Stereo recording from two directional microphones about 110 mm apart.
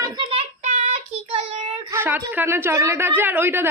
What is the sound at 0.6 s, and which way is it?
Child singing, 90° right.